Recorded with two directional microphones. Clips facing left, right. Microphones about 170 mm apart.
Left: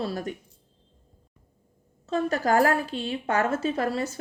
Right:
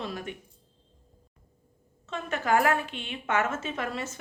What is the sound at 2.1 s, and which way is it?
A woman's voice, 35° left (ahead or behind).